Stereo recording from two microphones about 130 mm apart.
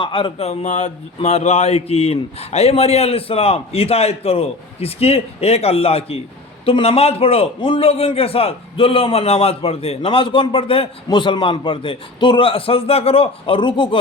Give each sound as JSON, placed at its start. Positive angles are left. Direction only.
{"t": 0.0, "sound": "a man's voice", "side_deg": 40}